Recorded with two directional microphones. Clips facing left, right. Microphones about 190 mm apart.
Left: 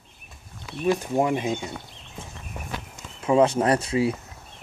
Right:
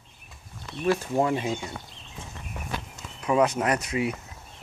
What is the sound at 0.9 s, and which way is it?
Speech, 15° left (ahead or behind).